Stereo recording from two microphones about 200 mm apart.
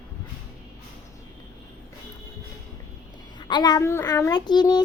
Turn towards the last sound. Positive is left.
turn(degrees=20)  # may be behind; listen again after turning